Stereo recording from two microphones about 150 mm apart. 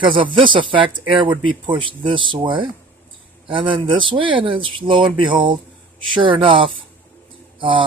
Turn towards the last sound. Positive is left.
turn(degrees=-35)  # may be behind; listen again after turning